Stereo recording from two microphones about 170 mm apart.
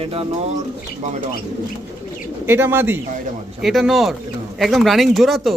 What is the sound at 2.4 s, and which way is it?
Speech, 15° right (ahead or behind).